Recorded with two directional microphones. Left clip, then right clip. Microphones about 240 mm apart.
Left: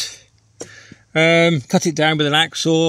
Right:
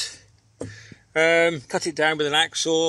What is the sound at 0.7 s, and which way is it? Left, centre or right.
Speech, left.